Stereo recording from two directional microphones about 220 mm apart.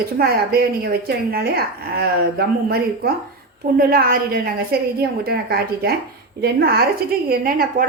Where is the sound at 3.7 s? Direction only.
40° right (ahead or behind).